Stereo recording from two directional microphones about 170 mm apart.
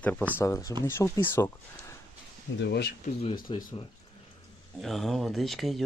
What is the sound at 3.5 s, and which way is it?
Speech, 30° left (ahead or behind).